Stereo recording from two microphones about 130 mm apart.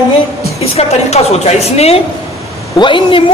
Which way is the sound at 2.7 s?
40° left (ahead or behind).